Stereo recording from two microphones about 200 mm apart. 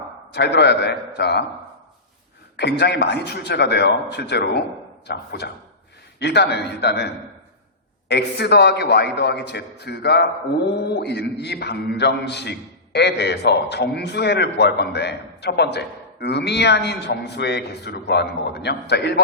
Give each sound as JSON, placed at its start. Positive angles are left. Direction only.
{"t": 0.3, "sound": "a man's voice", "side_deg": 55}
{"t": 2.6, "sound": "a man's voice", "side_deg": 55}